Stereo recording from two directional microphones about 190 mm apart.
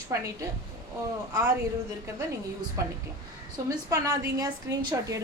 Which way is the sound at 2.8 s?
15° right (ahead or behind).